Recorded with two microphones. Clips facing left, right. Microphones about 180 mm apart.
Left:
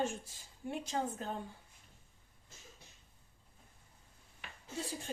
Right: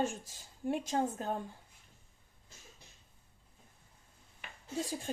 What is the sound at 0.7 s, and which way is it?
Speech, 50° right (ahead or behind).